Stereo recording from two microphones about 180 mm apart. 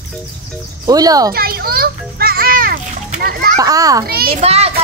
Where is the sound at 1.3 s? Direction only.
55° right (ahead or behind).